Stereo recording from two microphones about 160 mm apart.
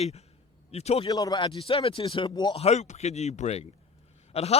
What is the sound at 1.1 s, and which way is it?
A man's voice, 25° left (ahead or behind).